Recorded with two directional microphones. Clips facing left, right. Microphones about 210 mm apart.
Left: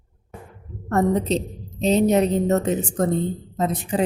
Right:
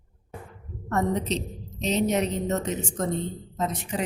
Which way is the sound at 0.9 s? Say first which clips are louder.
Left 6 dB; 35° left (ahead or behind).